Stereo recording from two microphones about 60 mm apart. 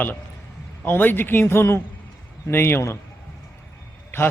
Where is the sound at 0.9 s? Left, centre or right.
Left.